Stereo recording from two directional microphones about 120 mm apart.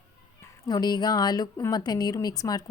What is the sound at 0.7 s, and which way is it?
A woman's voice, 35° left (ahead or behind).